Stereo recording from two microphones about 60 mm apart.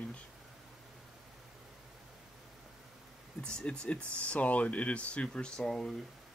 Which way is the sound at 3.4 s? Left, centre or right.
Centre.